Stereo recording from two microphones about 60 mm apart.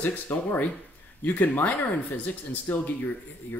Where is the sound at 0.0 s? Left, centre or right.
Left.